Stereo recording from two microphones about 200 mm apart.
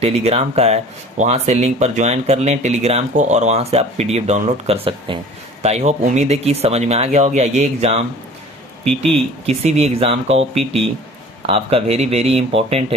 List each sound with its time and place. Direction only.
0.0 s speech: 30° right (ahead or behind)
9.5 s speech: 30° right (ahead or behind)